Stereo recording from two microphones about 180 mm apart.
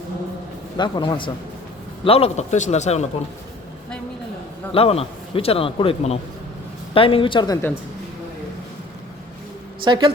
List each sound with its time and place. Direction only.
0.8 s a man's voice: 25° left (ahead or behind)
4.7 s a man's voice: 30° left (ahead or behind)
9.8 s a woman's voice: 25° right (ahead or behind)